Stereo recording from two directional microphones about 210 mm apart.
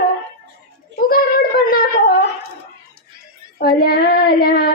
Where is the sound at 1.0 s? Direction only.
45° left (ahead or behind).